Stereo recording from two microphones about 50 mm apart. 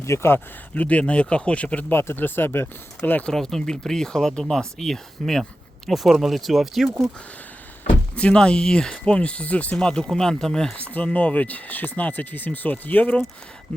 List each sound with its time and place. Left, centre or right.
0.0 s speech: left
0.3 s speech: left
1.9 s speech: left
3.2 s speech: centre
5.9 s speech: centre
8.1 s speech: left
9.7 s speech: centre
10.8 s speech: left